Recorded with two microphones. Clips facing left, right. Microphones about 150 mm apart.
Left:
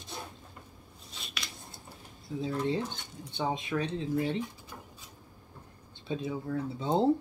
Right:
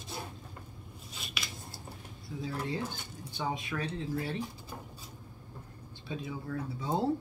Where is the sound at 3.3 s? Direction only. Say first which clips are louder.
Left 4 dB; 25° left (ahead or behind).